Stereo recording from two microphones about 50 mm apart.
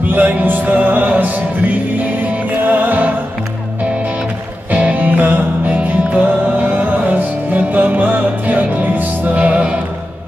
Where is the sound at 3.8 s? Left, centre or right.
Right.